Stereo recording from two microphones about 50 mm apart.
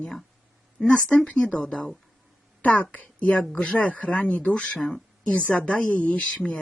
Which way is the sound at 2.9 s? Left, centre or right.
Left.